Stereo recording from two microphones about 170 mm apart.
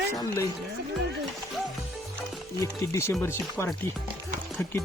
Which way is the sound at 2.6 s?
15° left (ahead or behind).